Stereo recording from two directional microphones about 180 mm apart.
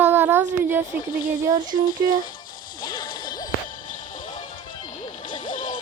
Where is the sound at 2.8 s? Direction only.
25° left (ahead or behind).